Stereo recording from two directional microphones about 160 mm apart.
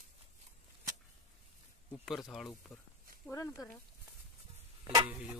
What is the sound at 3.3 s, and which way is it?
Speech, 20° left (ahead or behind).